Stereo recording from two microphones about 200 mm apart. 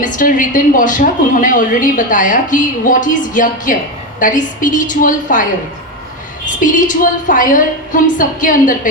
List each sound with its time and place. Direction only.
0.0 s a woman's voice: 40° left (ahead or behind)
6.6 s a woman's voice: 40° left (ahead or behind)